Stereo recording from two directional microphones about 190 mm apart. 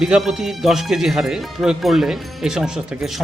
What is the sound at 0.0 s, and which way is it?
Speech, 5° right (ahead or behind).